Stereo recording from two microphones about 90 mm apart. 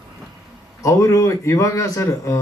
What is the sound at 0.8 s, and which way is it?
A man's voice, 35° left (ahead or behind).